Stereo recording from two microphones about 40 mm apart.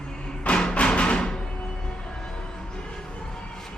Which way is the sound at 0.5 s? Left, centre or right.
Left.